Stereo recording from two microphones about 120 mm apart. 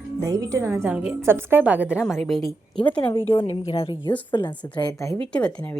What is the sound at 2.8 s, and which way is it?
A woman's voice, 40° left (ahead or behind).